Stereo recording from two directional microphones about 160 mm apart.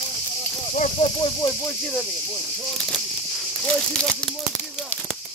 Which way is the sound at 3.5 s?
5° left (ahead or behind).